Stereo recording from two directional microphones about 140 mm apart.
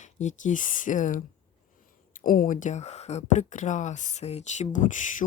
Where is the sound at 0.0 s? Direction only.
60° left (ahead or behind).